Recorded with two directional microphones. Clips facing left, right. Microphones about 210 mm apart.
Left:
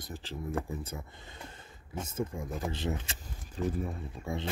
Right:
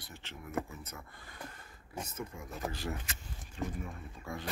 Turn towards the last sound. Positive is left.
turn(degrees=25)  # may be behind; listen again after turning